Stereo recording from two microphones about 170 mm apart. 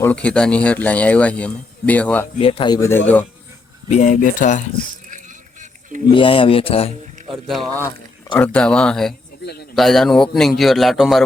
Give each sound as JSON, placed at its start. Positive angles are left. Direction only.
{"t": 0.0, "sound": "speech", "side_deg": 10}
{"t": 2.4, "sound": "speech", "side_deg": 30}
{"t": 3.8, "sound": "speech", "side_deg": 45}
{"t": 4.9, "sound": "sheep", "side_deg": -50}
{"t": 6.1, "sound": "speech", "side_deg": 30}
{"t": 7.3, "sound": "a man's voice", "side_deg": 0}
{"t": 9.4, "sound": "a man's voice", "side_deg": 70}
{"t": 9.7, "sound": "a man's voice", "side_deg": 0}